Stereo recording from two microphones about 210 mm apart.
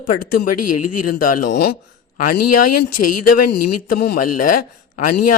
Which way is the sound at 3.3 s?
45° left (ahead or behind).